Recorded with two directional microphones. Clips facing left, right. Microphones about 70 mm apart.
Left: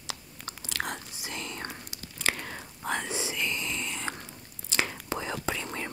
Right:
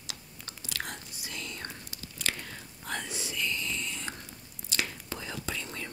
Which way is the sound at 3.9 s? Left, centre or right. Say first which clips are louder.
Left 4 dB; left.